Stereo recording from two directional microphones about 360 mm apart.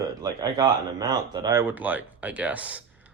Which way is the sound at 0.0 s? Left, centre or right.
Centre.